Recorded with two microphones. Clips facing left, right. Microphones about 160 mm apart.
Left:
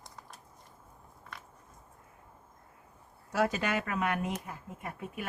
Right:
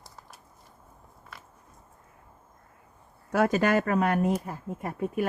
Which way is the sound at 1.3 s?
5° right (ahead or behind).